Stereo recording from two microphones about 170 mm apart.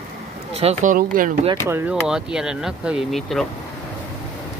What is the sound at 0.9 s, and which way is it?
Speech, 50° right (ahead or behind).